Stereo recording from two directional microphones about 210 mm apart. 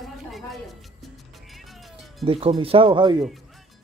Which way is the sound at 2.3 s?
25° right (ahead or behind).